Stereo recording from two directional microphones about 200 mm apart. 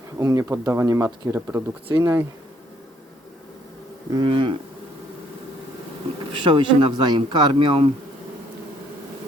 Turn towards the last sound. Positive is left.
turn(degrees=-25)  # may be behind; listen again after turning